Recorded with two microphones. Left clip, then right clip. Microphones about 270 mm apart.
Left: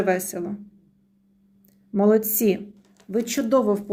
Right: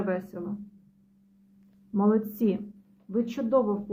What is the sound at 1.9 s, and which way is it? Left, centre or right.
A woman's voice, left.